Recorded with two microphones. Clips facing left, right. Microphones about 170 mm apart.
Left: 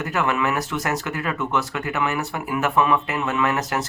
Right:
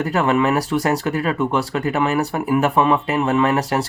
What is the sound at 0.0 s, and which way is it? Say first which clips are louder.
Speech: right 5 dB; 30° right (ahead or behind).